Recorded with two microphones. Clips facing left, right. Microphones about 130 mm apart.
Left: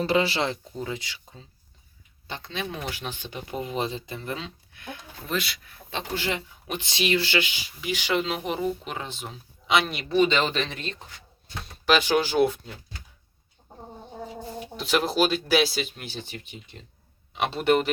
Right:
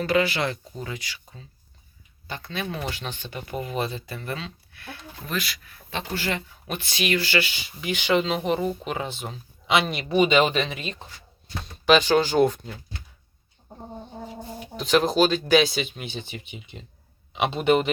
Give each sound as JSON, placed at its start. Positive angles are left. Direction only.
{"t": 0.0, "sound": "speech", "side_deg": 30}
{"t": 7.6, "sound": "speech", "side_deg": 0}
{"t": 10.1, "sound": "speech", "side_deg": -15}
{"t": 11.9, "sound": "speech", "side_deg": 10}
{"t": 14.8, "sound": "speech", "side_deg": 5}